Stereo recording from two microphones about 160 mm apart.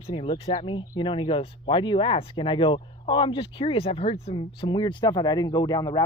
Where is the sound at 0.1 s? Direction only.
35° left (ahead or behind).